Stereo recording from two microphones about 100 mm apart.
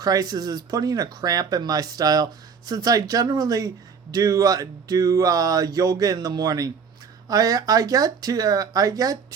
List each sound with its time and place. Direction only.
0.0 s speech: 40° right (ahead or behind)